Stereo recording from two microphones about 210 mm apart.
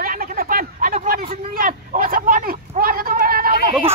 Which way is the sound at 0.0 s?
45° right (ahead or behind).